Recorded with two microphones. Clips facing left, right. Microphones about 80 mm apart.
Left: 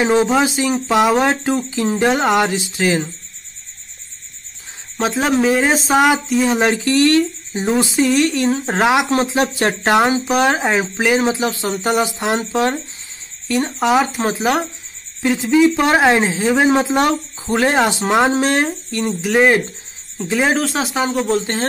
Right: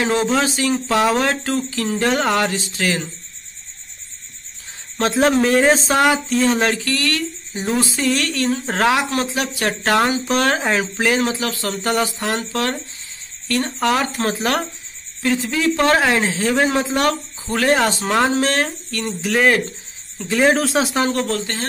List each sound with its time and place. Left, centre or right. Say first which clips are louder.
0.0 s speech: left 4 dB; centre
4.9 s speech: right 1 dB; centre
20.3 s speech: right 1 dB; centre
21.3 s speech: left 5 dB; left